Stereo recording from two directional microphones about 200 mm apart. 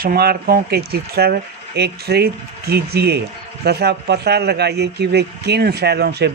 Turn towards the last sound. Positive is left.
turn(degrees=-55)  # may be behind; listen again after turning